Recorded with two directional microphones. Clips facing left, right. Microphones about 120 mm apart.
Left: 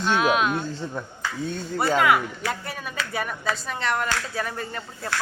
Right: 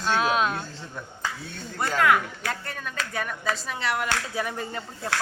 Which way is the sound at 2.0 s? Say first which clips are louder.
Right 1 dB; 5° left (ahead or behind).